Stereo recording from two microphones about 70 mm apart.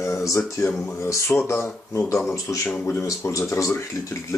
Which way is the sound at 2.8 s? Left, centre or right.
Left.